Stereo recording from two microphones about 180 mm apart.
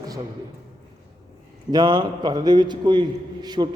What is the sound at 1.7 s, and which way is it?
A man's voice, 25° right (ahead or behind).